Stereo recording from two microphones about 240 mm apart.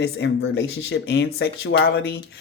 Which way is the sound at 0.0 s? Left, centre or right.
Left.